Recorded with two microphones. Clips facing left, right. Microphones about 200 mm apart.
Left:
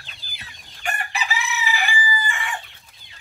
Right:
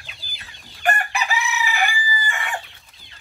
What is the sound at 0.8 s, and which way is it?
Chicken, 60° right (ahead or behind).